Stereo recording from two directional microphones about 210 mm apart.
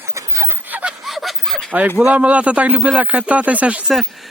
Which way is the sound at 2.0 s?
5° right (ahead or behind).